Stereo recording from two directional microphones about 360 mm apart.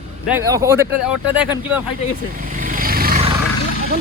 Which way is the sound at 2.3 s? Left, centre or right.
Right.